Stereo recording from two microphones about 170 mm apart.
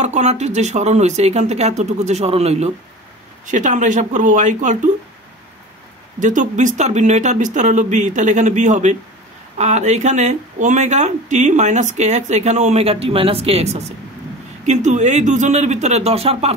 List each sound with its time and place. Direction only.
0.0 s speech: 40° right (ahead or behind)
6.1 s speech: 50° right (ahead or behind)